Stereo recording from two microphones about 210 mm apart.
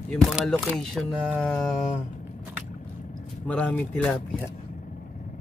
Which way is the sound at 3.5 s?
5° left (ahead or behind).